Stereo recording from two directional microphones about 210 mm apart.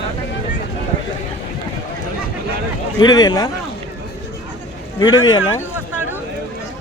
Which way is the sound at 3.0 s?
20° left (ahead or behind).